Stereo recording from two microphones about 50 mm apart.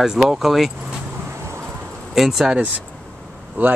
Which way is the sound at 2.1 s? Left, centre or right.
Centre.